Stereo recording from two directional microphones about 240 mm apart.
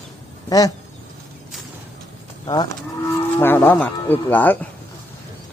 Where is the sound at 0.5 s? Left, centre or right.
Centre.